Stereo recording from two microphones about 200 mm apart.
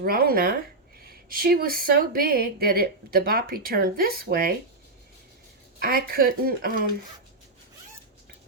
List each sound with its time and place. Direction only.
0.0 s speech: 50° right (ahead or behind)
5.8 s speech: 50° right (ahead or behind)